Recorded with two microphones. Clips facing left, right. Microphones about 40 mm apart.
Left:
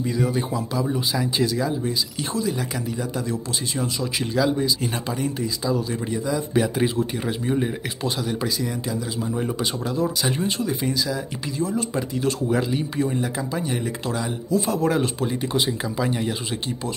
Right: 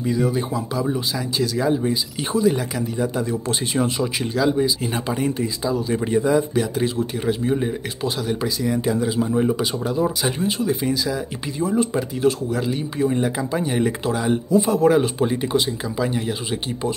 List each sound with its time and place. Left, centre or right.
0.0 s speech: centre
1.8 s speech: centre
3.7 s speech: right
4.2 s speech: centre
6.0 s speech: right
6.5 s speech: centre
8.9 s speech: right
9.3 s speech: centre
10.4 s speech: centre
11.6 s speech: centre
15.5 s speech: centre